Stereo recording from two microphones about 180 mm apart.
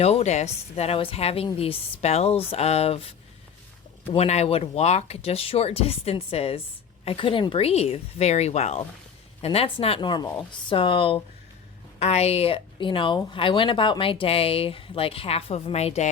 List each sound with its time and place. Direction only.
0.0 s speech: 35° left (ahead or behind)